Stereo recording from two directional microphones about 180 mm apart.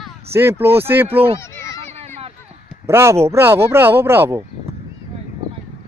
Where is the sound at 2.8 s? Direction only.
15° right (ahead or behind).